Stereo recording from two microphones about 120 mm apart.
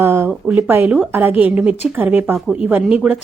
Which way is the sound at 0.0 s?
20° right (ahead or behind).